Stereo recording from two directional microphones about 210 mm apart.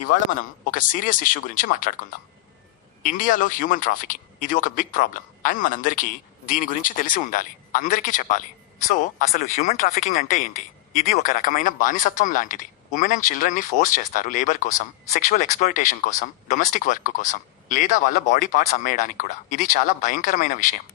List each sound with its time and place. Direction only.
0.3 s a man's voice: 40° left (ahead or behind)